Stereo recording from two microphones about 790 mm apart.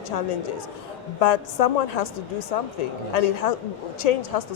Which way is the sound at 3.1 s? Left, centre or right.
Left.